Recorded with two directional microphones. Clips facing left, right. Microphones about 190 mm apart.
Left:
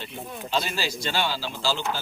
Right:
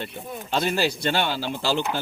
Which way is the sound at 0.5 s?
55° right (ahead or behind).